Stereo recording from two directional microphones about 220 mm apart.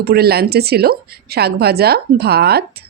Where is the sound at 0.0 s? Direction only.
45° right (ahead or behind).